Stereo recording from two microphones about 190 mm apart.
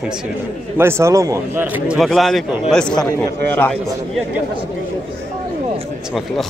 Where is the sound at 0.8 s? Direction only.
15° right (ahead or behind); by 4.2 s 5° left (ahead or behind).